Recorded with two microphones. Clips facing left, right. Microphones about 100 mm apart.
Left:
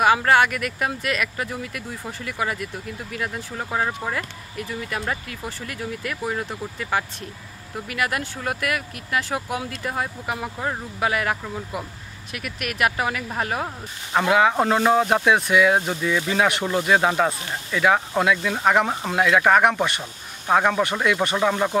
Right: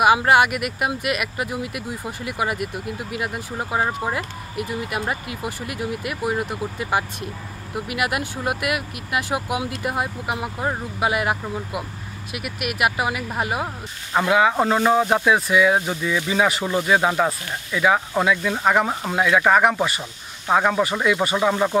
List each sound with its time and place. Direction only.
0.0 s speech: 15° right (ahead or behind)